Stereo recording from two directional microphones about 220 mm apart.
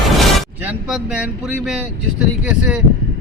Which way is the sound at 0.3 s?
5° right (ahead or behind).